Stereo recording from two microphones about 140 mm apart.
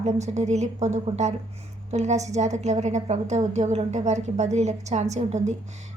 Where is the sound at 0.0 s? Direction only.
55° right (ahead or behind).